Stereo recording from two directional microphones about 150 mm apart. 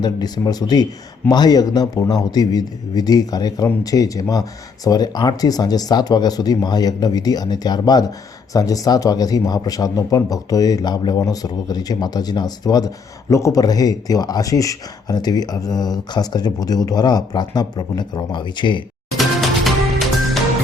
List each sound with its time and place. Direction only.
0.0 s a man's voice: 25° left (ahead or behind)
19.1 s music: centre (ahead or behind)